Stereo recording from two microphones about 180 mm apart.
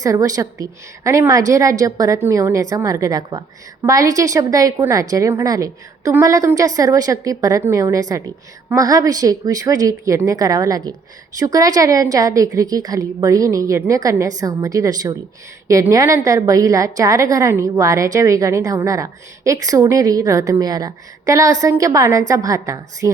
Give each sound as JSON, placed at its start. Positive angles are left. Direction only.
{"t": 0.0, "sound": "a woman's voice", "side_deg": -20}